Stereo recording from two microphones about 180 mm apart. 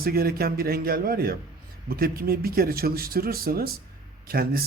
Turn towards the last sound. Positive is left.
turn(degrees=-55)  # may be behind; listen again after turning